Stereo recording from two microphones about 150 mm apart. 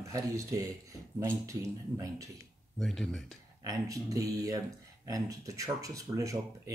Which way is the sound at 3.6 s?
25° right (ahead or behind).